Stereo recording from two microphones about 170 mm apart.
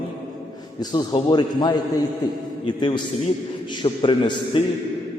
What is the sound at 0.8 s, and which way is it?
A man's voice, 25° left (ahead or behind).